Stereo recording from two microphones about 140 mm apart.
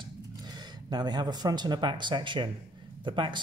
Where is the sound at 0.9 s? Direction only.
30° right (ahead or behind).